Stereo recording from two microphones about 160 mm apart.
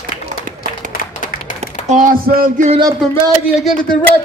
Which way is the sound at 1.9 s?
55° right (ahead or behind).